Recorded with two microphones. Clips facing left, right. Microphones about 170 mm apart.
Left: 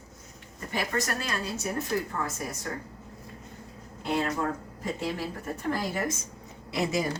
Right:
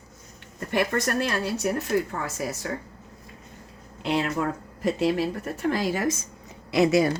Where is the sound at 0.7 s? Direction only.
65° right (ahead or behind); by 2.6 s 90° right.